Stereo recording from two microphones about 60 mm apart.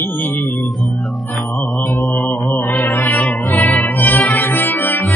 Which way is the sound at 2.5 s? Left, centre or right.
Left.